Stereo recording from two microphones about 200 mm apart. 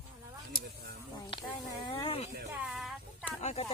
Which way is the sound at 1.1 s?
20° left (ahead or behind).